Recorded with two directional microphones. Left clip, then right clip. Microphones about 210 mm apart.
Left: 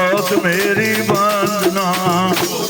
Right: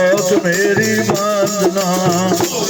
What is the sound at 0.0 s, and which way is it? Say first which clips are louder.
Music: right 2 dB; 20° left (ahead or behind).